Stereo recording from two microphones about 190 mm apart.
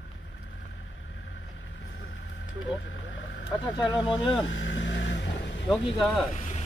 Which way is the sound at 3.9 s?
25° left (ahead or behind).